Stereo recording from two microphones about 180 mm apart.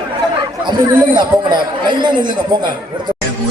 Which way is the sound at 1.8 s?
25° right (ahead or behind).